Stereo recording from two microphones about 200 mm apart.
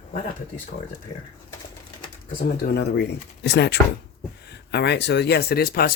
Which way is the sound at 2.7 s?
55° left (ahead or behind).